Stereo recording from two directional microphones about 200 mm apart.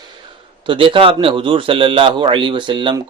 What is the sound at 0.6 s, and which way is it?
Speech, 25° right (ahead or behind).